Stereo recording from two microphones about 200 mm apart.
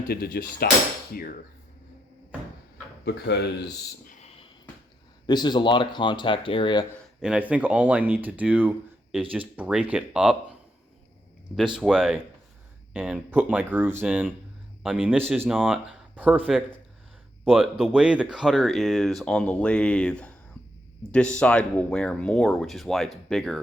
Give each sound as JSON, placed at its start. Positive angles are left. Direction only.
{"t": 0.1, "sound": "speech", "side_deg": 50}
{"t": 3.0, "sound": "speech", "side_deg": 55}
{"t": 4.2, "sound": "a sound", "side_deg": 30}
{"t": 5.2, "sound": "speech", "side_deg": 20}
{"t": 7.2, "sound": "speech", "side_deg": -5}
{"t": 11.8, "sound": "speech", "side_deg": 0}